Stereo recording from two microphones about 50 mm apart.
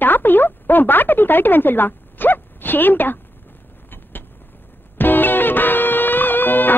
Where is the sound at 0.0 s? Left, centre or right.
Left.